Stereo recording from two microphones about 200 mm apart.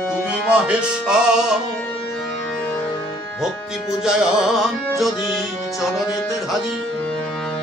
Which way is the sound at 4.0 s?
5° right (ahead or behind).